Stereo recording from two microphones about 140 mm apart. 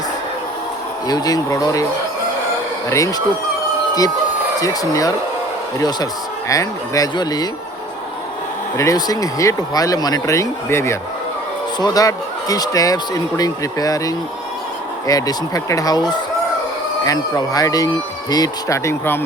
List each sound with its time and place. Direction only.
1.0 s speech: 25° left (ahead or behind)
2.9 s speech: 25° left (ahead or behind)
4.6 s speech: 25° left (ahead or behind)
6.5 s speech: 25° left (ahead or behind)
8.8 s speech: 25° left (ahead or behind)
17.1 s speech: 25° left (ahead or behind)